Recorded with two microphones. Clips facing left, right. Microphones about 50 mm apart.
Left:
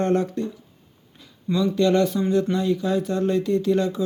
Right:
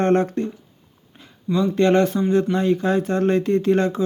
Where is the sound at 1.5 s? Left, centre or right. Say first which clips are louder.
Right 2 dB; right.